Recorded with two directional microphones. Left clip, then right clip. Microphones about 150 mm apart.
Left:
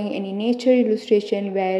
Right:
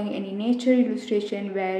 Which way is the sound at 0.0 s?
30° left (ahead or behind).